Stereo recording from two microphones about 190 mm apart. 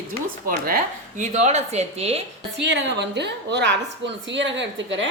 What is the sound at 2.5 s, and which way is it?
A woman's voice, 70° right (ahead or behind).